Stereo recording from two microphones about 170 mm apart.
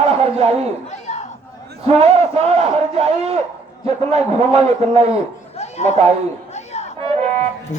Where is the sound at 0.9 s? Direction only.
40° left (ahead or behind).